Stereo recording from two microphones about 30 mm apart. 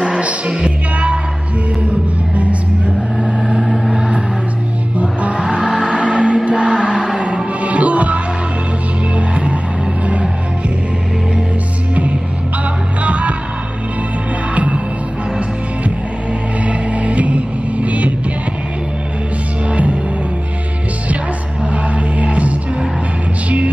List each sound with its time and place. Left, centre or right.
0.2 s music: right
3.2 s vehicle: right
5.2 s music: right
5.6 s music: right
7.6 s music: right
13.0 s music: right
14.5 s music: right
16.6 s music: right
19.7 s music: right
22.2 s music: right